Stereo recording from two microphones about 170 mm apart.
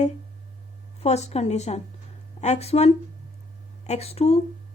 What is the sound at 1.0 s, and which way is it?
Speech, 40° left (ahead or behind).